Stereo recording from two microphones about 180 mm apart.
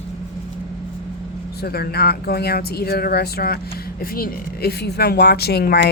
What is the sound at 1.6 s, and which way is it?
Speech, 60° left (ahead or behind).